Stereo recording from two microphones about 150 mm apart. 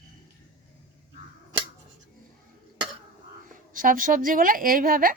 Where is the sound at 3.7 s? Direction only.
65° right (ahead or behind).